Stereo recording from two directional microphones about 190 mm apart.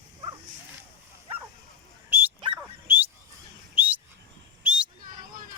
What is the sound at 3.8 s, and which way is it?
Bird, 10° right (ahead or behind).